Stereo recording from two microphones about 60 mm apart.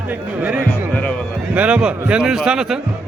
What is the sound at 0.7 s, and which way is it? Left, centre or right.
Speech, left.